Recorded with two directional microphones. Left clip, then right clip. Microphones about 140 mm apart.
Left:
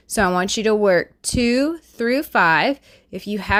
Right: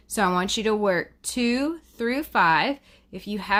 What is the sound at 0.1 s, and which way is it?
Speech, 45° left (ahead or behind).